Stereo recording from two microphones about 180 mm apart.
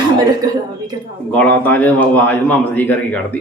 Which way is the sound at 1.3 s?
10° left (ahead or behind).